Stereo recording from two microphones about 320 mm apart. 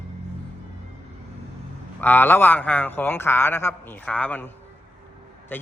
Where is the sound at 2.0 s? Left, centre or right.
Centre.